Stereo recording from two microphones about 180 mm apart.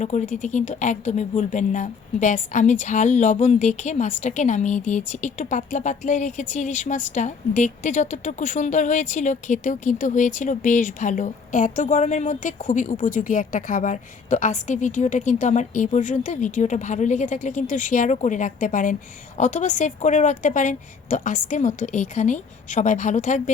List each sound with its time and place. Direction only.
0.0 s speech: 40° left (ahead or behind)